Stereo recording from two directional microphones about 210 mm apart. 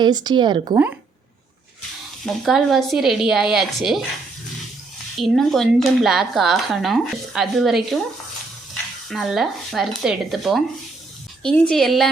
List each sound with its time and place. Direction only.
0.0 s speech: 20° right (ahead or behind)
2.2 s speech: centre (ahead or behind)
5.2 s speech: centre (ahead or behind)